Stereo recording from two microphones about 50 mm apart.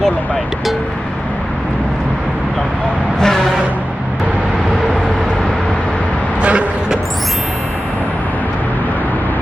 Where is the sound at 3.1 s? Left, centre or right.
Centre.